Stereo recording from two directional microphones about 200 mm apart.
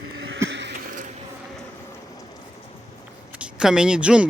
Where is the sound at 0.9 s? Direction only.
45° right (ahead or behind).